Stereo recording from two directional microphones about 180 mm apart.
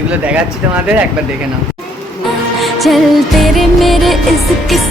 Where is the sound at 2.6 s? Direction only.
Centre (ahead or behind).